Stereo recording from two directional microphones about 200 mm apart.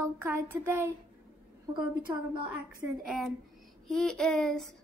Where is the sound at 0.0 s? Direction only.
10° right (ahead or behind).